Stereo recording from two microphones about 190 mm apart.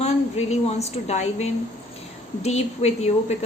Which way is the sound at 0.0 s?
35° left (ahead or behind).